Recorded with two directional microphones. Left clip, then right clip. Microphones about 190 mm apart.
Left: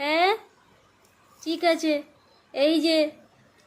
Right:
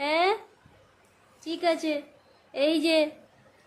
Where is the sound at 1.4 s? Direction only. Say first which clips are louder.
Left 3 dB; 15° left (ahead or behind).